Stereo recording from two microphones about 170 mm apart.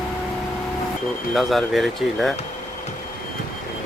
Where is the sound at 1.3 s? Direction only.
Centre (ahead or behind).